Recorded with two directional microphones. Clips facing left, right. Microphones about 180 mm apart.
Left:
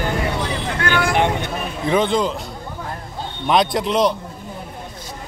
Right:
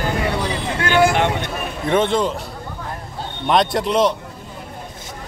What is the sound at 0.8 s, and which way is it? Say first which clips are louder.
Vehicle: right 6 dB; 20° right (ahead or behind).